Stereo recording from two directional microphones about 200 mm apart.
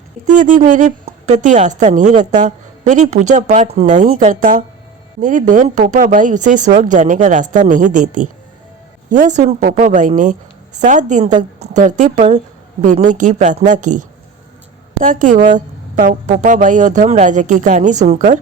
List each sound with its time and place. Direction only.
0.3 s a woman's voice: 40° right (ahead or behind)
15.0 s a woman's voice: 40° right (ahead or behind)